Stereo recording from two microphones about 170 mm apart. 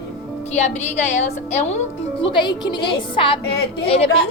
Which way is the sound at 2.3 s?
25° left (ahead or behind).